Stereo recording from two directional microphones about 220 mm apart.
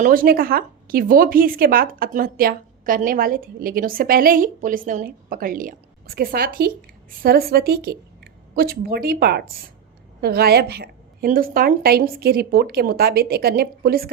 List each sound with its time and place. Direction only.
0.0 s a woman's voice: 40° right (ahead or behind)